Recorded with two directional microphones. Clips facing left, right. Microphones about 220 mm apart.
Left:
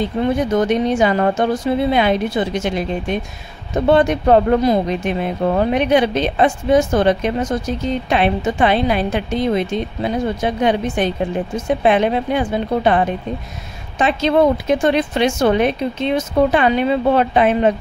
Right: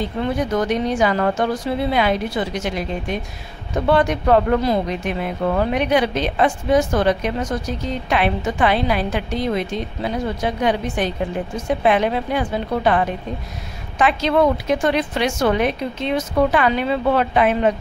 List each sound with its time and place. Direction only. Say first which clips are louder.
0.4 s speech: left 2 dB; 25° left (ahead or behind)